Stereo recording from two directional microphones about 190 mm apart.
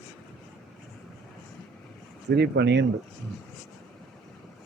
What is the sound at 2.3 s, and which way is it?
Speech, 60° right (ahead or behind).